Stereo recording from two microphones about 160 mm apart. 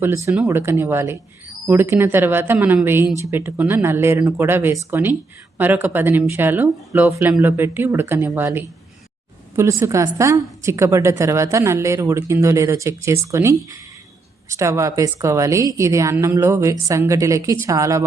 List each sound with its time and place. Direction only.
0.3 s a woman's voice: 15° right (ahead or behind)